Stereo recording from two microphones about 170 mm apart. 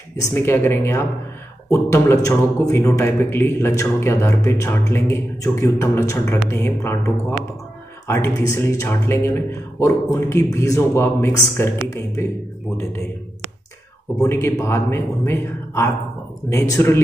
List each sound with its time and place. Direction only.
0.2 s speech: 15° left (ahead or behind)
14.1 s speech: 15° left (ahead or behind)